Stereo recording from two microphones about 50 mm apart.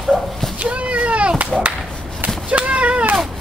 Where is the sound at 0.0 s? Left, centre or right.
Centre.